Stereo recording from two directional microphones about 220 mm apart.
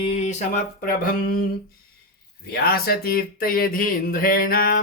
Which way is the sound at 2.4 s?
45° left (ahead or behind).